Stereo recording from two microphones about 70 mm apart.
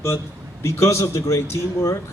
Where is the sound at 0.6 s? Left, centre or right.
Left.